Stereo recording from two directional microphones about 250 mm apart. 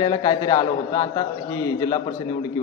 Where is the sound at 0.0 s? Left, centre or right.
Centre.